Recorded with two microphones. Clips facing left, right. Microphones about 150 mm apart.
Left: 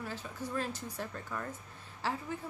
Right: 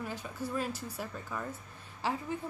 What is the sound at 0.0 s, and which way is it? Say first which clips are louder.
Speech: right 2 dB; 15° right (ahead or behind).